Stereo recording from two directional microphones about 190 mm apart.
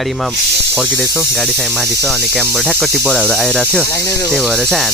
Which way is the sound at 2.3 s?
Centre (ahead or behind).